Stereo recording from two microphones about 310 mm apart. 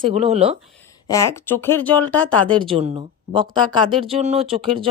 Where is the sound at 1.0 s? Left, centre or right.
Centre.